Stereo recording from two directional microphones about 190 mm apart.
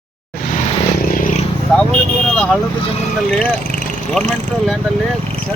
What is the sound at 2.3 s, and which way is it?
Speech, 5° left (ahead or behind).